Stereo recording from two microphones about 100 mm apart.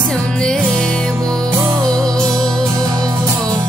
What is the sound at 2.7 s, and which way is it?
Music, 40° right (ahead or behind).